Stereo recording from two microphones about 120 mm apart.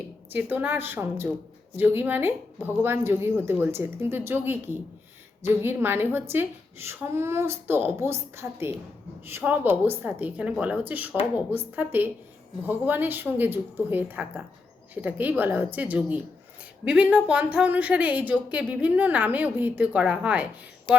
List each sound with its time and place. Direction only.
0.3 s a woman's voice: 15° right (ahead or behind)